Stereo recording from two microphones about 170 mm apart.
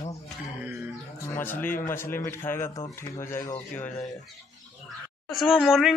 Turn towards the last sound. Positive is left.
turn(degrees=0)  # may be behind; listen again after turning